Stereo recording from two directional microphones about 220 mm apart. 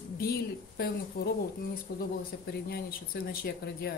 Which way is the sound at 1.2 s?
40° left (ahead or behind).